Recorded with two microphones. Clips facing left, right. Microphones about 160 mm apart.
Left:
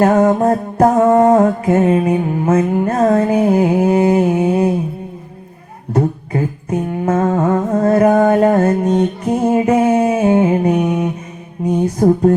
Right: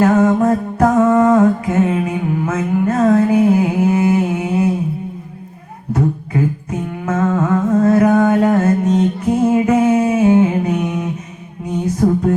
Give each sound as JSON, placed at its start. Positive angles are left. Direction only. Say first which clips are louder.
{"t": 0.0, "sound": "music", "louder": "left 1 dB", "side_deg": 35}
{"t": 5.9, "sound": "music", "louder": "left 1 dB", "side_deg": 35}
{"t": 9.6, "sound": "mantra", "louder": "left 1 dB", "side_deg": 35}
{"t": 11.9, "sound": "music", "louder": "left 3 dB", "side_deg": 40}